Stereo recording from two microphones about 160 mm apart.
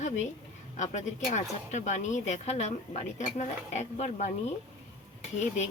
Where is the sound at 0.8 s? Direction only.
45° left (ahead or behind).